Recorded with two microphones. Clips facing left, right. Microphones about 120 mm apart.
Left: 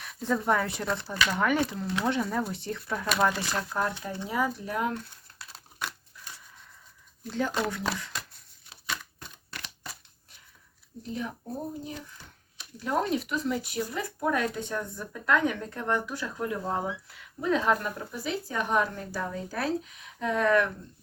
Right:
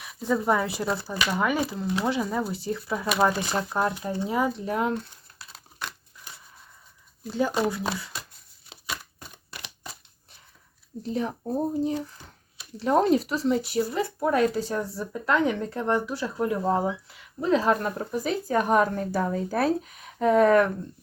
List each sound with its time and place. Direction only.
0.0 s speech: 5° right (ahead or behind); by 4.9 s 30° right (ahead or behind)
7.3 s speech: 10° right (ahead or behind)
9.5 s a sound: 15° right (ahead or behind)
11.1 s speech: 35° right (ahead or behind)